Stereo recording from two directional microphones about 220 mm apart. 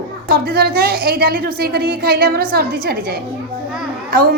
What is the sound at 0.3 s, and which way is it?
A woman's voice, 45° right (ahead or behind).